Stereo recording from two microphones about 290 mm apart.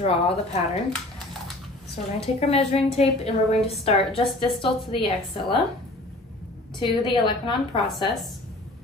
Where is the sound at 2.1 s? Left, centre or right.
Left.